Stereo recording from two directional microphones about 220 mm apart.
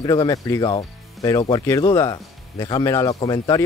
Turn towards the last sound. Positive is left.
turn(degrees=20)  # may be behind; listen again after turning